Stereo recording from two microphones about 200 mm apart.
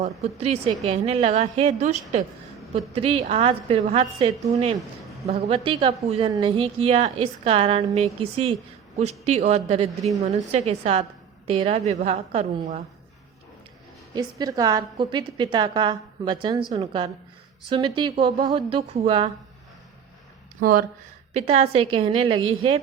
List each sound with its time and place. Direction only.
0.0 s a woman's voice: 30° right (ahead or behind)
14.2 s a woman's voice: 20° right (ahead or behind)
20.6 s speech: 45° right (ahead or behind)
21.3 s a woman's voice: 30° right (ahead or behind)